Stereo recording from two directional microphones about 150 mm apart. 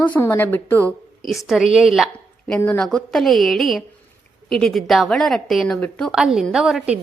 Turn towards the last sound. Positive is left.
turn(degrees=-5)  # may be behind; listen again after turning